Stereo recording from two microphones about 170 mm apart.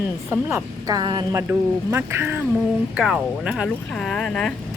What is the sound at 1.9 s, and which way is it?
A woman's voice, 15° right (ahead or behind).